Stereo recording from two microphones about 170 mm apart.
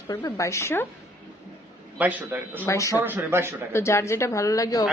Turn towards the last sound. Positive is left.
turn(degrees=20)  # may be behind; listen again after turning